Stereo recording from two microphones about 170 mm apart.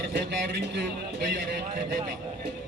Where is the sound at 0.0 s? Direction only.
75° right (ahead or behind).